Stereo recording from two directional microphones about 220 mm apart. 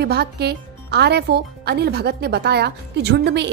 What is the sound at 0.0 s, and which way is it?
Speech, 45° right (ahead or behind).